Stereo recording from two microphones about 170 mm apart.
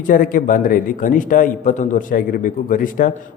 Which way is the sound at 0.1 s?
55° left (ahead or behind).